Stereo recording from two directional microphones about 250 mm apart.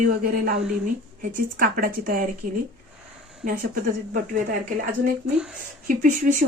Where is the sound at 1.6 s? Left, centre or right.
Right.